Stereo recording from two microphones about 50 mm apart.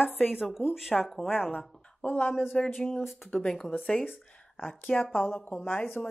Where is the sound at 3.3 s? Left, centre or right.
Centre.